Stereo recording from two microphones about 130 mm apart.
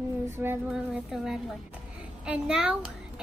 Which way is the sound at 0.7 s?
5° right (ahead or behind).